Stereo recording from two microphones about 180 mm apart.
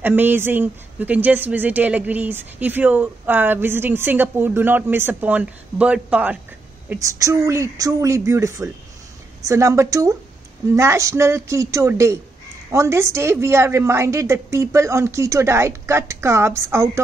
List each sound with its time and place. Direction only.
0.0 s speech: 10° right (ahead or behind)
6.9 s speech: 15° right (ahead or behind)